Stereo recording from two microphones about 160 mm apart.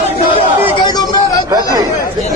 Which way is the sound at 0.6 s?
30° left (ahead or behind).